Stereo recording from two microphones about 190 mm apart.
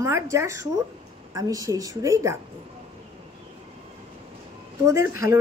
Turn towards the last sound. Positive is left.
turn(degrees=-15)  # may be behind; listen again after turning